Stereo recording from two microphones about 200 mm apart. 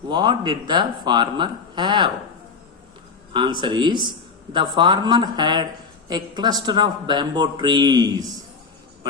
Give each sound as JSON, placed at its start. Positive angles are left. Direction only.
{"t": 0.1, "sound": "speech", "side_deg": -25}
{"t": 3.3, "sound": "speech", "side_deg": -25}